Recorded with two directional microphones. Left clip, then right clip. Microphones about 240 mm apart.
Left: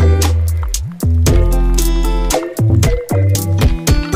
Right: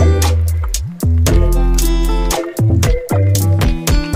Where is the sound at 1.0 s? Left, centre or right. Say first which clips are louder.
Even; centre.